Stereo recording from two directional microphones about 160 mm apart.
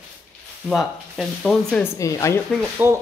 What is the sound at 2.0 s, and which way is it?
Speech, 20° left (ahead or behind).